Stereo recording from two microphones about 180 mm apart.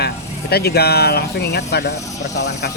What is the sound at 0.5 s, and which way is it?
Speech, 60° left (ahead or behind).